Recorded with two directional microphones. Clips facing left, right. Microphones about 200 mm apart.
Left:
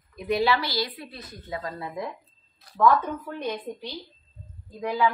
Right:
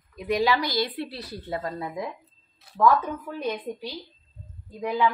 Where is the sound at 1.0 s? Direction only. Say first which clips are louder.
Right 7 dB; 35° right (ahead or behind).